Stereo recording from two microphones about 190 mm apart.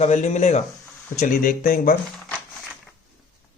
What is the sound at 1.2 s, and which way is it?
Speech, 45° left (ahead or behind).